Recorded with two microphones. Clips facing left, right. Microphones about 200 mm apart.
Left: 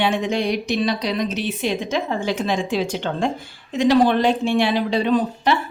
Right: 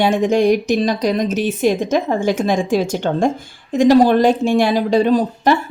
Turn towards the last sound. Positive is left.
turn(degrees=-40)  # may be behind; listen again after turning